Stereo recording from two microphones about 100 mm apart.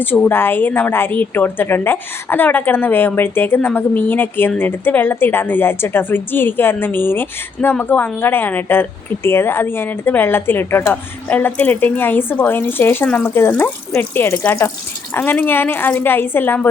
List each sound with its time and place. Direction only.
0.0 s a woman's voice: 20° left (ahead or behind)